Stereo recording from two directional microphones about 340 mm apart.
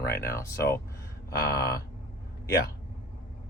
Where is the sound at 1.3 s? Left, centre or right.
Left.